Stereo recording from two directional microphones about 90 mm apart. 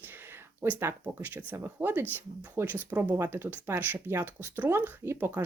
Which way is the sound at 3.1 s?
30° right (ahead or behind).